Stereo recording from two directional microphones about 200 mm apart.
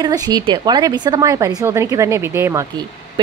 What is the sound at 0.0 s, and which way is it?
A woman's voice, 20° right (ahead or behind).